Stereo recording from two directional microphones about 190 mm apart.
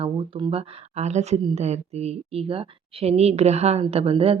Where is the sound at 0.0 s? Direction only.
25° right (ahead or behind).